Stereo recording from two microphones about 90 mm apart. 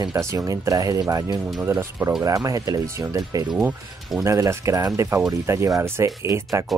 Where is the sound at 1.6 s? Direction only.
25° right (ahead or behind); by 3.4 s 45° right (ahead or behind).